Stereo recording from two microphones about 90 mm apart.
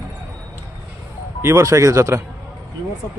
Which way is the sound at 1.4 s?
30° right (ahead or behind).